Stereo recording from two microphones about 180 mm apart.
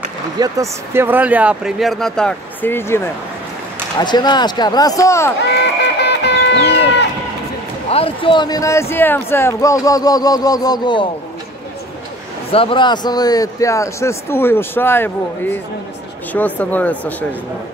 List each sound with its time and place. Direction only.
0.4 s speech: 15° right (ahead or behind); by 3.0 s 10° left (ahead or behind)
4.0 s speech: 25° left (ahead or behind)
5.6 s music: 70° left (ahead or behind)
7.9 s speech: 30° left (ahead or behind)
12.4 s a man's voice: 30° left (ahead or behind); by 17.1 s 10° left (ahead or behind)